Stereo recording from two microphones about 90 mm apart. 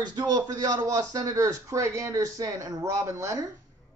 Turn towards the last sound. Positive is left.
turn(degrees=-35)  # may be behind; listen again after turning